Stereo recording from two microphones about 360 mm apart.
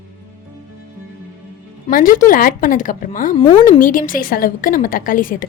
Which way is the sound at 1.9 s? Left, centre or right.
Left.